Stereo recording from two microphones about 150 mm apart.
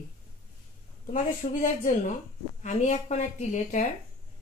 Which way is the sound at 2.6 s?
55° left (ahead or behind).